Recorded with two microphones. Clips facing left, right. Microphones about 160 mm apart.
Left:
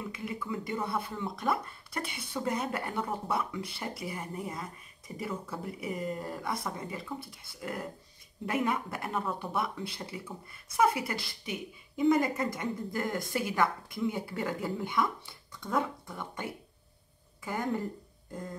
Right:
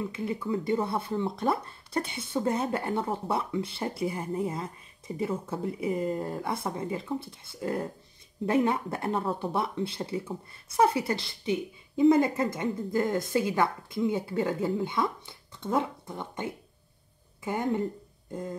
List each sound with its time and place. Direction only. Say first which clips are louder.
0.1 s speech: right 6 dB; 30° right (ahead or behind)